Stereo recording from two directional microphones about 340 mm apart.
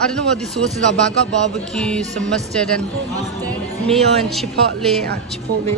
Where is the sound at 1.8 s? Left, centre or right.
Centre.